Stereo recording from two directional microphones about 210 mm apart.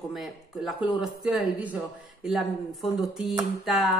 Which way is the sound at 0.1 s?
Centre (ahead or behind).